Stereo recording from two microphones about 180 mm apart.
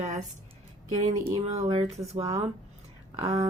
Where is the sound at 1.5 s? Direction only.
30° right (ahead or behind).